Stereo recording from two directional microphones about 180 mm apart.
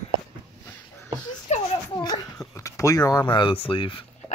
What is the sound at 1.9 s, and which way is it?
Speech, 20° left (ahead or behind).